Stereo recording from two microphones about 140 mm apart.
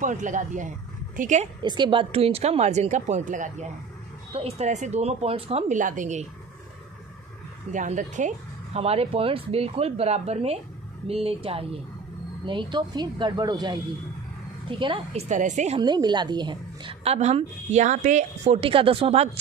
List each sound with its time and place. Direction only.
0.0 s a woman's voice: 65° right (ahead or behind)
1.6 s speech: 35° right (ahead or behind); by 3.6 s 65° right (ahead or behind)
4.3 s speech: 45° right (ahead or behind); by 6.2 s 60° right (ahead or behind)
7.7 s speech: 60° right (ahead or behind); by 15.2 s 35° right (ahead or behind)
15.2 s speech: 60° right (ahead or behind)
15.8 s speech: 30° right (ahead or behind)
17.0 s speech: 50° right (ahead or behind)